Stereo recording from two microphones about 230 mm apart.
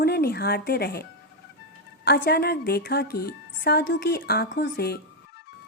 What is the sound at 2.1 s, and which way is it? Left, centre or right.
A woman's voice, left.